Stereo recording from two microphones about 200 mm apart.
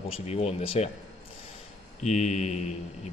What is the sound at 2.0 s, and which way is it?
Speech, 35° left (ahead or behind).